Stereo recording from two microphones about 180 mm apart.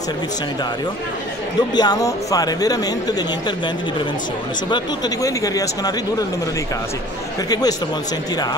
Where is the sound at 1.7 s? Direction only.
20° left (ahead or behind).